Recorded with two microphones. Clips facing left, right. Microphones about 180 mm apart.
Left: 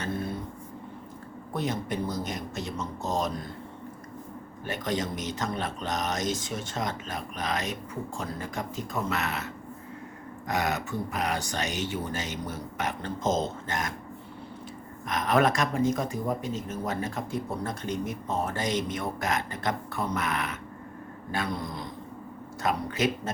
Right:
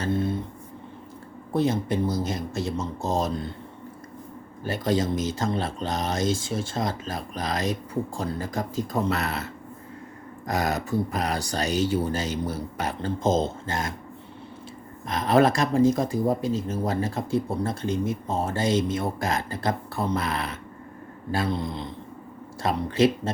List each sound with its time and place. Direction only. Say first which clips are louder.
0.0 s a sound: right 6 dB; 25° right (ahead or behind)
1.5 s a man's voice: right 7 dB; 30° right (ahead or behind)
4.6 s speech: right 6 dB; 30° right (ahead or behind)
15.0 s a man's voice: right 4 dB; 30° right (ahead or behind)